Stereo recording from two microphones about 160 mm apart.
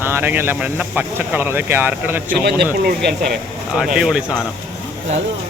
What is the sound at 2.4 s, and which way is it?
Speech, 90° right.